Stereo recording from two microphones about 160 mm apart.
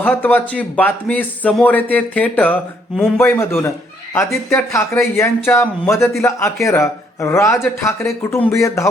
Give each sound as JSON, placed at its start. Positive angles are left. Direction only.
{"t": 0.0, "sound": "speech", "side_deg": 10}